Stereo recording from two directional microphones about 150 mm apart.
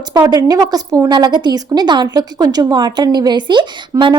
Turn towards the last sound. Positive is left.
turn(degrees=-30)  # may be behind; listen again after turning